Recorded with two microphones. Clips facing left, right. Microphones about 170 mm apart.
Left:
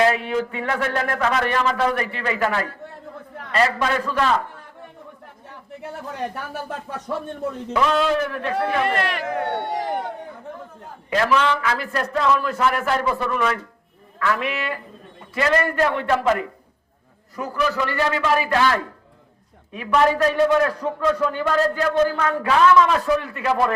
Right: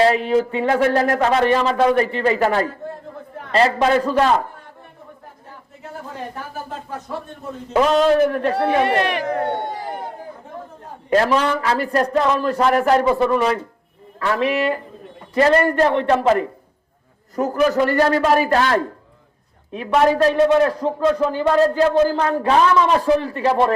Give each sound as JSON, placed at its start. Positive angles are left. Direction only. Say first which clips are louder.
{"t": 0.0, "sound": "speech", "louder": "right 4 dB", "side_deg": -35}
{"t": 7.7, "sound": "speech", "louder": "right 5 dB", "side_deg": -40}
{"t": 8.7, "sound": "a man's voice", "louder": "right 4 dB", "side_deg": -20}
{"t": 9.6, "sound": "speech", "louder": "left 2 dB", "side_deg": 75}
{"t": 11.1, "sound": "speech", "louder": "right 3 dB", "side_deg": -40}
{"t": 13.1, "sound": "speech", "louder": "right 5 dB", "side_deg": -30}
{"t": 17.3, "sound": "a man's voice", "louder": "right 6 dB", "side_deg": -45}